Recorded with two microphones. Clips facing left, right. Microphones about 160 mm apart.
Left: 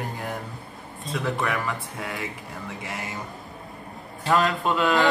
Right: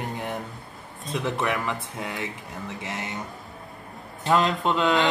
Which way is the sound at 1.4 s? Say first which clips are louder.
Right 1 dB; 20° right (ahead or behind).